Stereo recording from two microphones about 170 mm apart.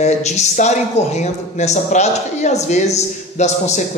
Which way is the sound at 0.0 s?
40° left (ahead or behind).